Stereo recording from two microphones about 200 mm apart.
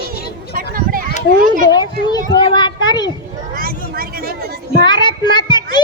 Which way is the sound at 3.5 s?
45° right (ahead or behind).